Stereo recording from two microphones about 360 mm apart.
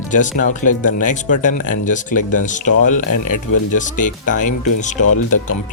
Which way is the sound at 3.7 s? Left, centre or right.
Left.